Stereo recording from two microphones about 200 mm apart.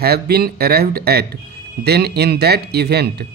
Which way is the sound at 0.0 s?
50° right (ahead or behind).